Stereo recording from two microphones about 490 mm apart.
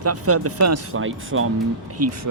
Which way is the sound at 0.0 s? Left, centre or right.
Right.